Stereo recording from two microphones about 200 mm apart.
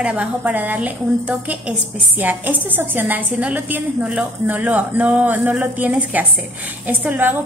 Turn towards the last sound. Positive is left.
turn(degrees=-10)  # may be behind; listen again after turning